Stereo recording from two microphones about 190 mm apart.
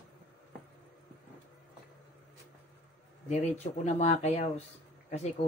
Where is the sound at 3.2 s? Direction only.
35° left (ahead or behind).